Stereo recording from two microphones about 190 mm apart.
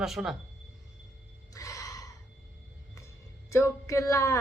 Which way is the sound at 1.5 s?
15° left (ahead or behind).